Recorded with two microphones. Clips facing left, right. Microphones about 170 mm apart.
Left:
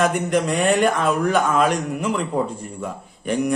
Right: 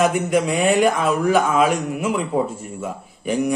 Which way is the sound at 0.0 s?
5° right (ahead or behind).